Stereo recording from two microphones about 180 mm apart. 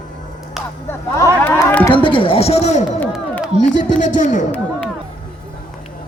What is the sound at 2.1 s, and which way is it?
A man's voice, 30° left (ahead or behind).